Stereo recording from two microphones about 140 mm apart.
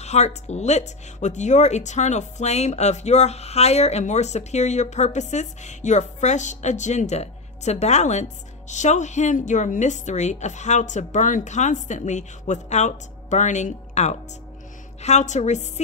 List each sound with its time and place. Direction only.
0.0 s speech: 50° left (ahead or behind)